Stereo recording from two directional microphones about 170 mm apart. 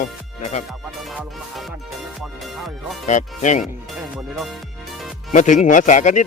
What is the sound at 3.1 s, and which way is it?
Speech, 45° left (ahead or behind).